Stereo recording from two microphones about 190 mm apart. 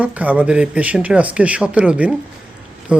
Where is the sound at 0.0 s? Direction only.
10° right (ahead or behind).